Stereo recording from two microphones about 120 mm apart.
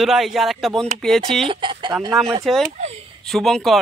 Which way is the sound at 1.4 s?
45° right (ahead or behind).